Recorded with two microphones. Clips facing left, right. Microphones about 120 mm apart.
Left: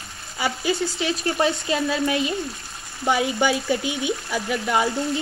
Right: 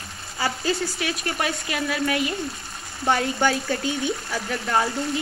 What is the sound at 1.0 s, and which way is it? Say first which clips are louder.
Speech: left 7 dB; 30° left (ahead or behind).